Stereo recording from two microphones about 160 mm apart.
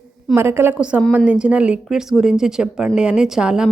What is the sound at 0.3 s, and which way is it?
A woman's voice, 15° right (ahead or behind).